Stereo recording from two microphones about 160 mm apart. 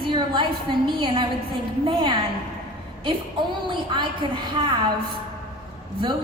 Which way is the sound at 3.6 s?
30° right (ahead or behind).